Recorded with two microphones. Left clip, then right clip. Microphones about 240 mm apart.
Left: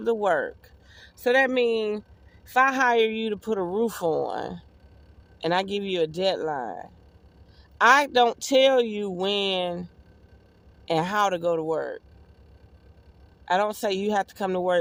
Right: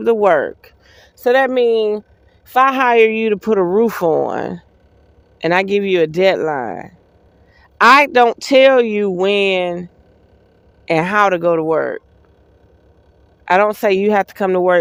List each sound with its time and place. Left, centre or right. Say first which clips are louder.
0.0 s speech: right 11 dB; centre
10.8 s speech: right 10 dB; centre
13.4 s speech: right 11 dB; right